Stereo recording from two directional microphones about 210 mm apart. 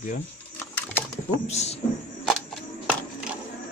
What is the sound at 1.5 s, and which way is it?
Speech, 30° left (ahead or behind).